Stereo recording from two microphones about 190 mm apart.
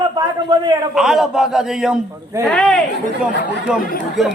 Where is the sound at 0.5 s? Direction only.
20° right (ahead or behind).